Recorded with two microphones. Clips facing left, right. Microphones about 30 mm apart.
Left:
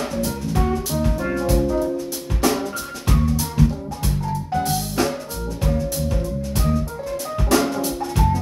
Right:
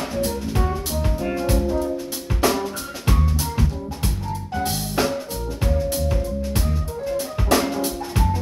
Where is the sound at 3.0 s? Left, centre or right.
Centre.